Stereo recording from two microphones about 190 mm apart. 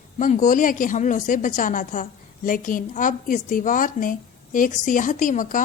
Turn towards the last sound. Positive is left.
turn(degrees=45)  # may be behind; listen again after turning